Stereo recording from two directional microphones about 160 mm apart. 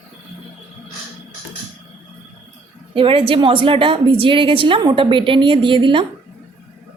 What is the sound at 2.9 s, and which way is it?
A woman's voice, 35° right (ahead or behind).